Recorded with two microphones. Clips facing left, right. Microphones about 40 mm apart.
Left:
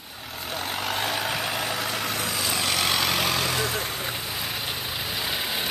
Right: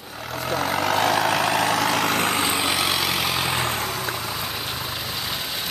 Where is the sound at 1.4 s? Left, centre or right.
Right.